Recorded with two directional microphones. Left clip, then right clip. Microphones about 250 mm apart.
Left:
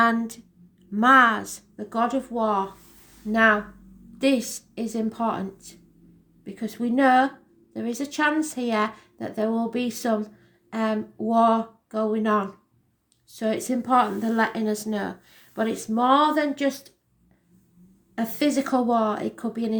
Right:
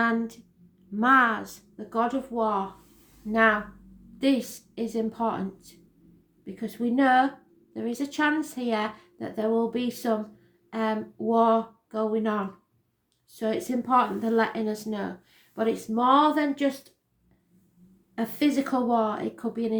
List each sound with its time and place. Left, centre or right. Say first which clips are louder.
0.0 s a sound: left 5 dB; left
0.9 s speech: left 4 dB; left
18.1 s speech: left 2 dB; left